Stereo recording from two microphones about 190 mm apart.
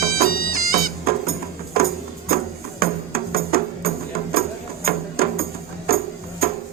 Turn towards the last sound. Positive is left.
turn(degrees=-50)  # may be behind; listen again after turning